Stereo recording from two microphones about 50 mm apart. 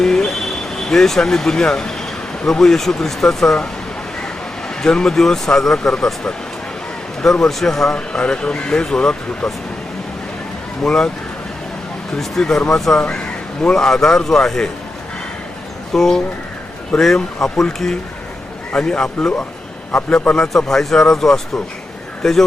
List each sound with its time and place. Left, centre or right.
0.0 s speech: centre
4.8 s a man's voice: centre
7.9 s a man's voice: left
10.8 s a man's voice: centre
12.1 s a man's voice: centre
15.9 s a man's voice: centre